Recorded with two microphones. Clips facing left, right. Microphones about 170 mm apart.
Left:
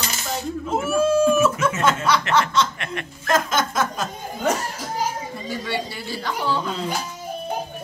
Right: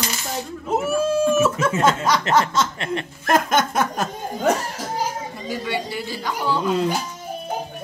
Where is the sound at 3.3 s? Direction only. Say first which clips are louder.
Right 2 dB; 60° right (ahead or behind).